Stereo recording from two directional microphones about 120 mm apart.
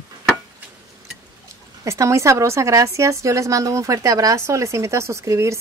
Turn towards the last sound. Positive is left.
turn(degrees=-25)  # may be behind; listen again after turning